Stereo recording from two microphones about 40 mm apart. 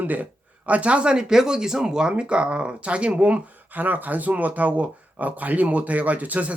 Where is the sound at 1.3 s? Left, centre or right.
Centre; by 3.4 s right.